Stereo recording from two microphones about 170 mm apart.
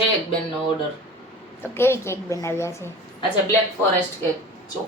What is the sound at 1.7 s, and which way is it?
A woman's voice, 15° left (ahead or behind).